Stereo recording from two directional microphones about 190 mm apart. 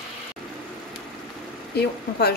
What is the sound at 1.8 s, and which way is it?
Speech, 55° left (ahead or behind).